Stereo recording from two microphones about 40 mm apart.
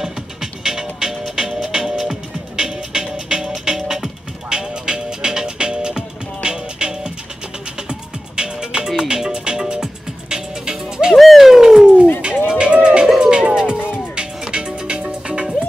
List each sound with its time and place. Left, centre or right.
0.0 s music: centre
11.1 s a sound: centre
12.4 s music: right
13.7 s music: left
14.1 s music: right